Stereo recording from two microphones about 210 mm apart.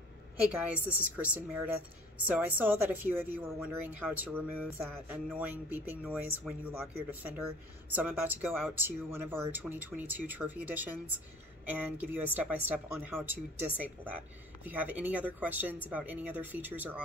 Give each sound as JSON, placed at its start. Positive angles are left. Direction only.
{"t": 0.7, "sound": "speech", "side_deg": -5}